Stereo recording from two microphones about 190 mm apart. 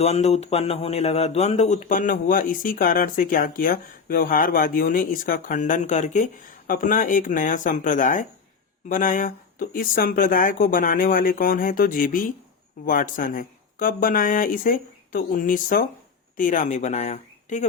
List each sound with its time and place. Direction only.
0.0 s speech: 35° left (ahead or behind)